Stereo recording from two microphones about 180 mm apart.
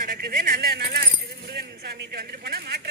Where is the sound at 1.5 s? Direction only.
65° right (ahead or behind).